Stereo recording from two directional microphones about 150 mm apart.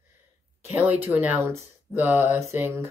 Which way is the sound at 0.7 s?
10° right (ahead or behind).